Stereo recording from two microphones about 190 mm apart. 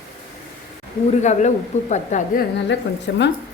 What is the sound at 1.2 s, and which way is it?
A woman's voice, 40° left (ahead or behind).